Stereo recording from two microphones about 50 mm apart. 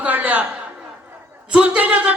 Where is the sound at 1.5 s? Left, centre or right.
Right.